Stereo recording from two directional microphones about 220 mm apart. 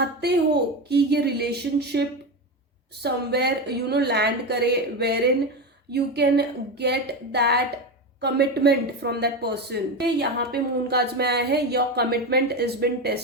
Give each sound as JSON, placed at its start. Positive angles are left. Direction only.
{"t": 0.2, "sound": "speech", "side_deg": -50}